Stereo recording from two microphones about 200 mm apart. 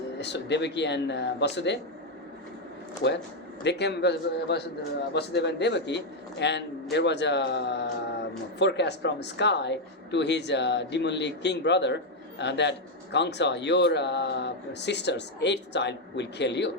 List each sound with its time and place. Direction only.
0.2 s a man's voice: 60° left (ahead or behind)
3.6 s a man's voice: 60° left (ahead or behind)